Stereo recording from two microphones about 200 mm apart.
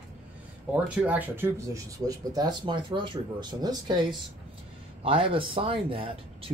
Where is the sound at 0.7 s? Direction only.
10° right (ahead or behind).